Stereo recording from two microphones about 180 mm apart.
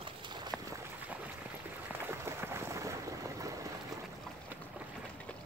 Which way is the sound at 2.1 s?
15° right (ahead or behind).